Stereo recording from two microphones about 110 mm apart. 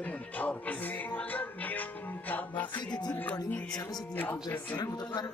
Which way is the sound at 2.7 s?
40° left (ahead or behind).